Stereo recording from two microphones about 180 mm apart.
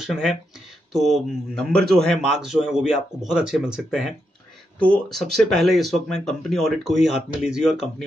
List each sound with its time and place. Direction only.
0.0 s speech: centre (ahead or behind)